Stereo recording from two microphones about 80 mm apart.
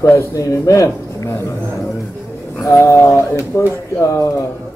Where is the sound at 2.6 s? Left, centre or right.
Left.